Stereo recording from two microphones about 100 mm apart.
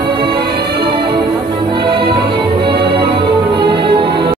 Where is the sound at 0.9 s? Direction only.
55° right (ahead or behind).